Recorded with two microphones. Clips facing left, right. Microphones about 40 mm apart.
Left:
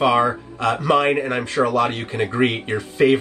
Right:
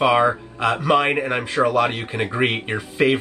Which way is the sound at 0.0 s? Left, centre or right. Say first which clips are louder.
Even; centre.